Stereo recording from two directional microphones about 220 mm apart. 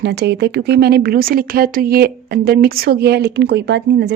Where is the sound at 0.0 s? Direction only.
50° right (ahead or behind).